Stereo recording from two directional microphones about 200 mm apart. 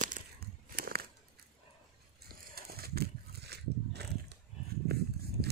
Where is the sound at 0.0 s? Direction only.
45° right (ahead or behind).